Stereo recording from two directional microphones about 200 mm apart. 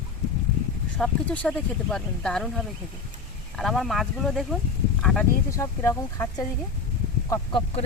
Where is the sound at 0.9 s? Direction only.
5° left (ahead or behind).